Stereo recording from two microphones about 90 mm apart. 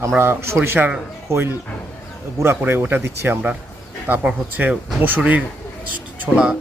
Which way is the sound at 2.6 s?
20° right (ahead or behind).